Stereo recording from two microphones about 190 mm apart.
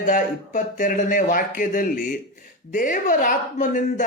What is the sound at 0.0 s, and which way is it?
Speech, 45° left (ahead or behind).